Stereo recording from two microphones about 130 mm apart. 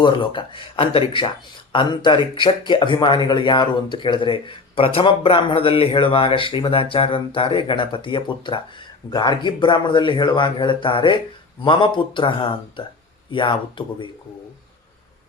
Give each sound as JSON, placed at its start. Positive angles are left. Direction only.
{"t": 0.0, "sound": "speech", "side_deg": 40}